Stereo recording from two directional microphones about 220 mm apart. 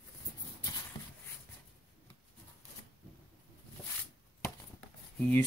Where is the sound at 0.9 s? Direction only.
20° left (ahead or behind).